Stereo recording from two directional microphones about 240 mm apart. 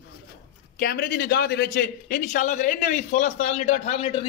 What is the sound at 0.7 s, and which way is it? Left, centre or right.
A man's voice, left.